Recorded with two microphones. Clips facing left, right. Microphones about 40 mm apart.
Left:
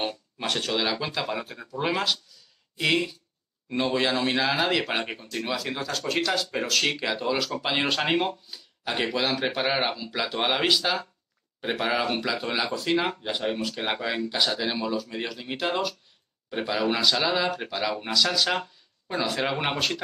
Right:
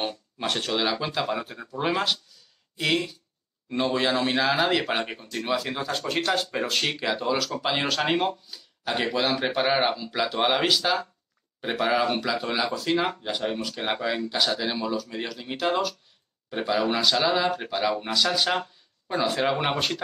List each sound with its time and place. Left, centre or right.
0.0 s a sound: centre
0.5 s speech: centre
5.9 s speech: right
6.8 s speech: centre
18.5 s speech: centre
19.5 s speech: centre